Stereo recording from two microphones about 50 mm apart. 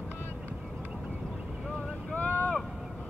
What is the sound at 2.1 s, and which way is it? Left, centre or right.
Boat, left.